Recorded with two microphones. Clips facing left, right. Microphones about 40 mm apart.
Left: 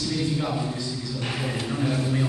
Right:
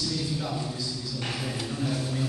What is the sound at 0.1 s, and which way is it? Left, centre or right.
Speech, left.